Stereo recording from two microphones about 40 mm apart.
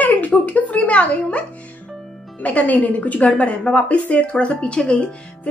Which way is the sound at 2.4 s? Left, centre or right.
Left.